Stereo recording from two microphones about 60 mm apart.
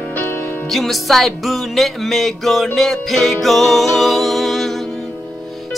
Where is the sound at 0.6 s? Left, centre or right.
Centre.